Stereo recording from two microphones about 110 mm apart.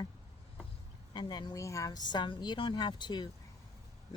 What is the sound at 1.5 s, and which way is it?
Speech, 30° left (ahead or behind).